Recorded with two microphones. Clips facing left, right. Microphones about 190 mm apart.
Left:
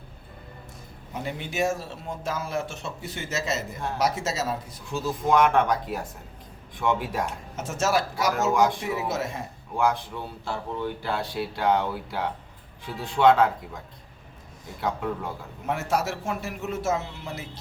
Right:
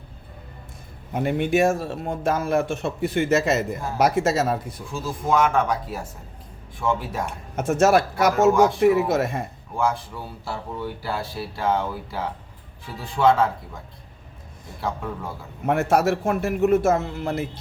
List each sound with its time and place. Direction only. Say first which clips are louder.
1.1 s speech: right 10 dB; 55° right (ahead or behind)
5.2 s speech: even; centre (ahead or behind)
7.5 s speech: right 8 dB; 55° right (ahead or behind)
8.5 s speech: right 4 dB; centre (ahead or behind)
9.0 s speech: right 7 dB; 55° right (ahead or behind)
9.7 s speech: even; centre (ahead or behind)
15.6 s speech: right 7 dB; 55° right (ahead or behind)